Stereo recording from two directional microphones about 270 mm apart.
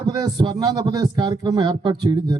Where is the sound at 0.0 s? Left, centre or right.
Centre.